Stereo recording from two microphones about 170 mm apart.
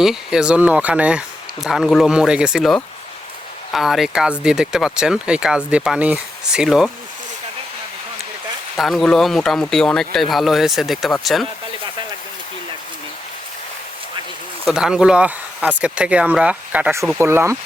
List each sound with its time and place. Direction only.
0.0 s speech: 5° right (ahead or behind)
8.7 s speech: centre (ahead or behind)
14.7 s speech: 5° right (ahead or behind)